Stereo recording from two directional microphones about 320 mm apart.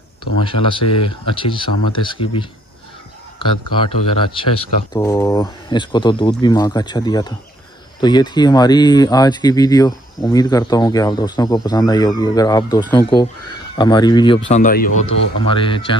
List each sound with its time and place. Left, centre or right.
0.4 s speech: centre
15.4 s speech: centre